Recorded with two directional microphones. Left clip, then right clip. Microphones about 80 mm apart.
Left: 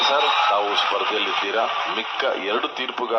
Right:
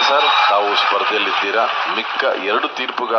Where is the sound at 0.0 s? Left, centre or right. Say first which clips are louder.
Right 5 dB; right.